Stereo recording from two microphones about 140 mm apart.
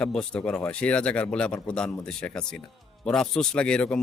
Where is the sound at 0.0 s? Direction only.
5° left (ahead or behind).